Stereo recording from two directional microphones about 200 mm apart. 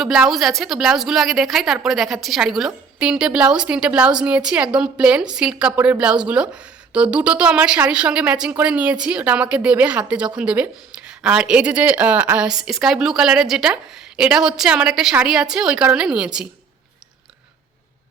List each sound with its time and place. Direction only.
0.0 s a woman's voice: centre (ahead or behind)